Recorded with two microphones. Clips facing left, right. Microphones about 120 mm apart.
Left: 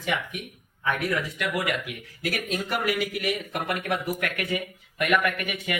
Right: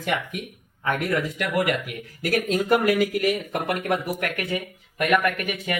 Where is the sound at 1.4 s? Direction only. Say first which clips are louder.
Right 4 dB; 45° right (ahead or behind).